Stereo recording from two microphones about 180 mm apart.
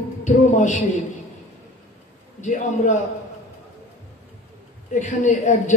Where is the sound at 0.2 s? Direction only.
45° left (ahead or behind).